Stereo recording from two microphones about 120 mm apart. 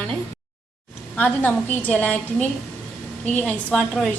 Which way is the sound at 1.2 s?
15° left (ahead or behind).